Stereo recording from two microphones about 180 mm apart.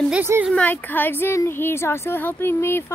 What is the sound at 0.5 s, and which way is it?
A woman's voice, 10° left (ahead or behind).